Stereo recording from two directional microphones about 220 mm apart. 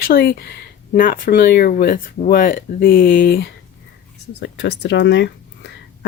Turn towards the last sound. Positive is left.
turn(degrees=50)  # may be behind; listen again after turning